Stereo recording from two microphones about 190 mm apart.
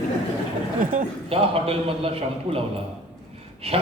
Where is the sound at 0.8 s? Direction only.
45° right (ahead or behind).